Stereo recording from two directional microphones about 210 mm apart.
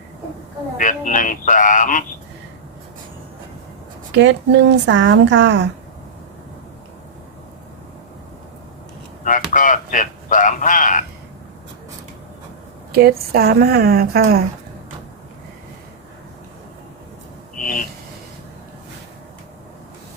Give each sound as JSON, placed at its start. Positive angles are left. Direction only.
{"t": 0.8, "sound": "speech", "side_deg": 40}
{"t": 4.1, "sound": "speech", "side_deg": -55}
{"t": 9.2, "sound": "a sound", "side_deg": 40}
{"t": 12.9, "sound": "a woman's voice", "side_deg": -45}
{"t": 17.6, "sound": "vehicle", "side_deg": 40}